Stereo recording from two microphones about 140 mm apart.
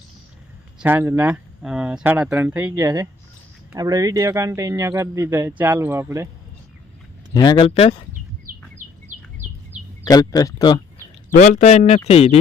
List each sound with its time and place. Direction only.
0.8 s speech: 15° right (ahead or behind)
2.8 s speech: 25° right (ahead or behind)
7.3 s speech: 35° left (ahead or behind)
10.0 s speech: 25° left (ahead or behind)
11.3 s speech: 65° left (ahead or behind); by 12.4 s 45° left (ahead or behind)